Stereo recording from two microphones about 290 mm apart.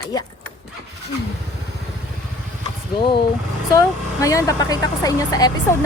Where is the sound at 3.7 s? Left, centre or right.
Centre.